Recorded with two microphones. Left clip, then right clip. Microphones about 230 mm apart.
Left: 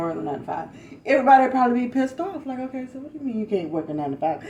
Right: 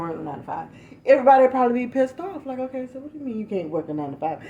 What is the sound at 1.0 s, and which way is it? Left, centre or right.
A woman's voice, right.